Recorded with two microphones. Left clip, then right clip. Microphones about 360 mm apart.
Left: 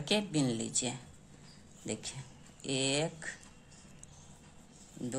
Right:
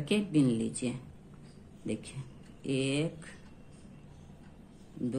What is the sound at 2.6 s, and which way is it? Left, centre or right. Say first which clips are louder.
Mantra: even; left.